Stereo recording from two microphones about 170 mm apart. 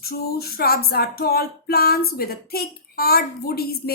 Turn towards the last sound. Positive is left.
turn(degrees=65)  # may be behind; listen again after turning